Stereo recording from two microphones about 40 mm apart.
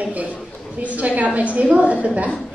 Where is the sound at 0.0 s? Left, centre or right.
Right.